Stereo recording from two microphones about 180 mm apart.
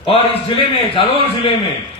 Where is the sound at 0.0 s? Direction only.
30° left (ahead or behind).